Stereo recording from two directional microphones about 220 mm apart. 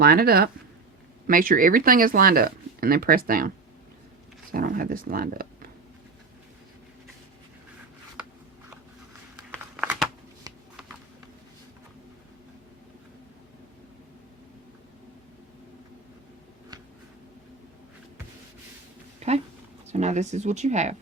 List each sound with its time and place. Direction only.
0.0 s speech: 45° right (ahead or behind)
4.5 s speech: 40° right (ahead or behind)
9.5 s a sound: 5° right (ahead or behind)
19.2 s dog: 30° right (ahead or behind)
19.9 s speech: 30° right (ahead or behind)